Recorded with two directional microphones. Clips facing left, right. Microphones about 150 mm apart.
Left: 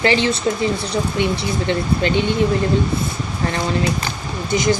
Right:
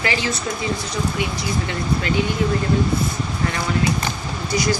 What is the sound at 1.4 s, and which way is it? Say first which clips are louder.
Speech: left 4 dB; 30° left (ahead or behind).